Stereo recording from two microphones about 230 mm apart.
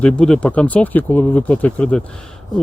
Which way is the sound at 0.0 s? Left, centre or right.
Centre.